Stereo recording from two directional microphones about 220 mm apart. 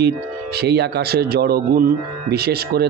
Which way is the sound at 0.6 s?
50° right (ahead or behind).